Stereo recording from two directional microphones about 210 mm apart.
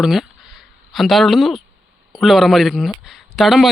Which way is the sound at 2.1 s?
Centre (ahead or behind).